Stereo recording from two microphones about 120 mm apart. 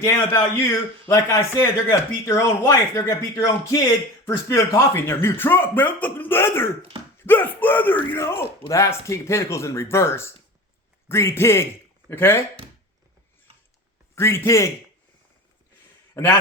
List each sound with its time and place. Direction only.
0.0 s a man's voice: 20° left (ahead or behind)
14.2 s a man's voice: 20° left (ahead or behind)
16.1 s a man's voice: 20° left (ahead or behind)